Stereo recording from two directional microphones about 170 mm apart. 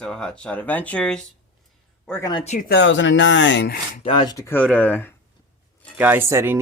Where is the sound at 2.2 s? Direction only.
25° left (ahead or behind).